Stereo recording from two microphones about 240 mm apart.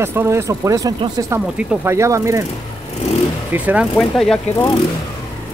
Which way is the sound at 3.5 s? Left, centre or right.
Centre.